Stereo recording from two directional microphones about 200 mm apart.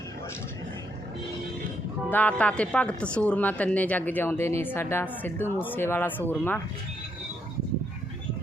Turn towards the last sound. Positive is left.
turn(degrees=10)  # may be behind; listen again after turning